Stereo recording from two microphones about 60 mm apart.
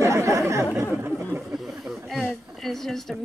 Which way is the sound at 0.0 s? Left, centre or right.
Right.